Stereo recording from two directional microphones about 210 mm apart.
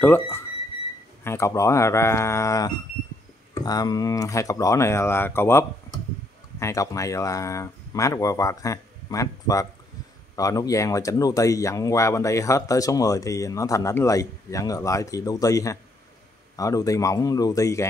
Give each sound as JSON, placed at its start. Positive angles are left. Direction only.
{"t": 0.0, "sound": "speech", "side_deg": 10}